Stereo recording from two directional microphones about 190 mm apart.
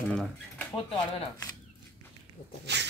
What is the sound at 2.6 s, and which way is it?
Speech, 65° right (ahead or behind).